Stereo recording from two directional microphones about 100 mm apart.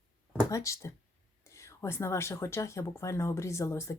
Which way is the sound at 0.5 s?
30° left (ahead or behind).